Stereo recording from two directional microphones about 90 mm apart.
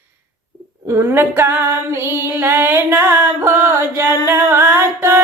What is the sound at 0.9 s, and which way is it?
Female singing, 25° right (ahead or behind).